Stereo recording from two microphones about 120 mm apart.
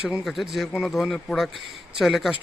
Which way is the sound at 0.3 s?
Centre (ahead or behind).